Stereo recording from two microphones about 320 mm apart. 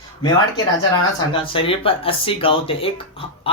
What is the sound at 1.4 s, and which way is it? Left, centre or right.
Speech, centre.